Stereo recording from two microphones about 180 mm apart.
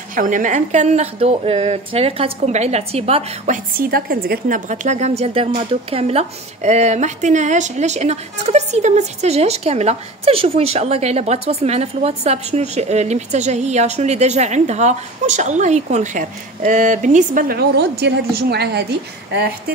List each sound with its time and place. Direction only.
0.1 s a woman's voice: 45° right (ahead or behind); by 19.5 s 65° right (ahead or behind)